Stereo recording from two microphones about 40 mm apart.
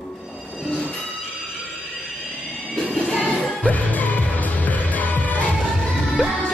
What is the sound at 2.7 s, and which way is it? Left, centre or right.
Music, left.